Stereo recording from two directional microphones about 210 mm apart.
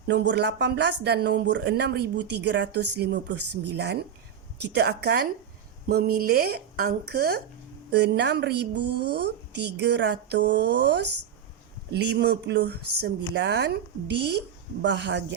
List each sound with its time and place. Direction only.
0.1 s speech: 55° right (ahead or behind)
3.3 s speech: 90° right
3.8 s speech: 50° right (ahead or behind)